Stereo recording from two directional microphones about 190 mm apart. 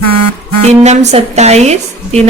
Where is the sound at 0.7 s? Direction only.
35° right (ahead or behind).